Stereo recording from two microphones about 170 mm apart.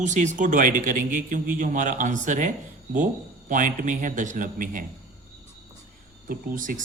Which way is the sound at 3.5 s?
50° right (ahead or behind).